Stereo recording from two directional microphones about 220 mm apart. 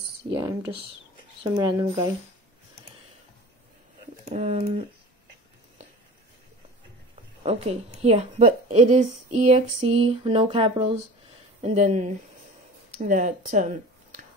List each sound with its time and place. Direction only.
0.3 s computer keyboard: 15° right (ahead or behind)
1.4 s a woman's voice: 20° right (ahead or behind)
4.3 s speech: 30° right (ahead or behind)
7.4 s a woman's voice: 30° right (ahead or behind)